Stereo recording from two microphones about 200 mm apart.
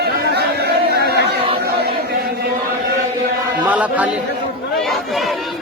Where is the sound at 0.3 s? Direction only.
55° right (ahead or behind).